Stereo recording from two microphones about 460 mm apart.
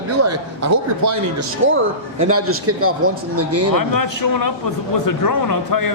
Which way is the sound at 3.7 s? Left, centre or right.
Left.